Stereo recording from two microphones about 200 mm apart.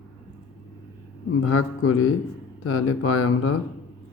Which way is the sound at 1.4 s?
90° left.